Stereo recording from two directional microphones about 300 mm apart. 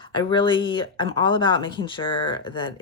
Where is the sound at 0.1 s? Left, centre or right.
Centre.